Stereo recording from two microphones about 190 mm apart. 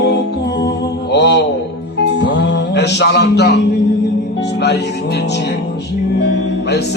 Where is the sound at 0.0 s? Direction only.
60° left (ahead or behind).